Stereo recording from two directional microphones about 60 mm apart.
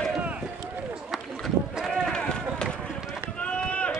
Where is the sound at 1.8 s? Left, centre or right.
Centre.